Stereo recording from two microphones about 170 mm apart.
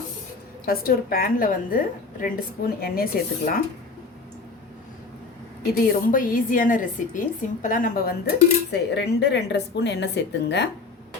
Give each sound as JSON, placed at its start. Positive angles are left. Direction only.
{"t": 0.6, "sound": "a woman's voice", "side_deg": 60}
{"t": 5.9, "sound": "a woman's voice", "side_deg": 55}